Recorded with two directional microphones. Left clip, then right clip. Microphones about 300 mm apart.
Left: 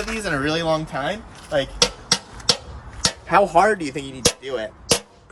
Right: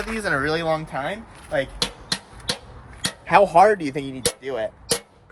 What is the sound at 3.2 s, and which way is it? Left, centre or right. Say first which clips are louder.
Speech: right 2 dB; right.